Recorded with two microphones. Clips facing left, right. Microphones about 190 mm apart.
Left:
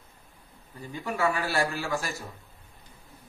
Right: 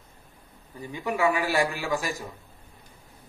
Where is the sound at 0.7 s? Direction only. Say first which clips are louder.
Right 3 dB; 15° right (ahead or behind).